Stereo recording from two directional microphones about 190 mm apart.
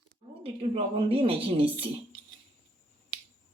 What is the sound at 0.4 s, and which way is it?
A woman's voice, 30° right (ahead or behind).